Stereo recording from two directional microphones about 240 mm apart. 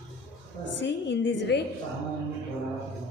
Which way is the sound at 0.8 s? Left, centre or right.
Left.